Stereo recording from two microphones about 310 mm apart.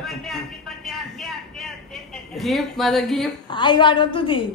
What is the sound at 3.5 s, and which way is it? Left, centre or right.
Speech, centre.